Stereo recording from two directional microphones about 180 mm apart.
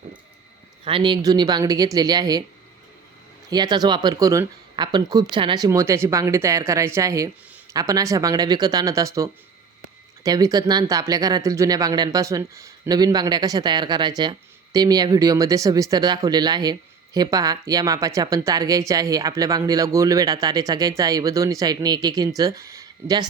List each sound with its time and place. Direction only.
0.9 s speech: 30° right (ahead or behind)
3.5 s speech: 20° right (ahead or behind)